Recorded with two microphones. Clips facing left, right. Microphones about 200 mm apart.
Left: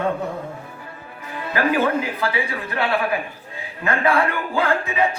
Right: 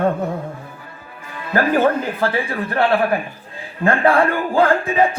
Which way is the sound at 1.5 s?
50° right (ahead or behind).